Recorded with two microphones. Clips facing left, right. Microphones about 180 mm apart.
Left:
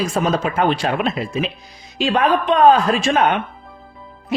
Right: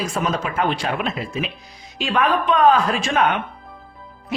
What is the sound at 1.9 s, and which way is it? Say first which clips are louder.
A man's voice: left 3 dB; 30° left (ahead or behind).